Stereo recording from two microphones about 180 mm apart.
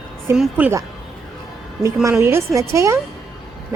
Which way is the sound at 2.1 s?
15° right (ahead or behind).